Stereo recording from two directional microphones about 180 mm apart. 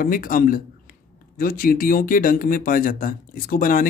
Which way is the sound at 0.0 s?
50° left (ahead or behind).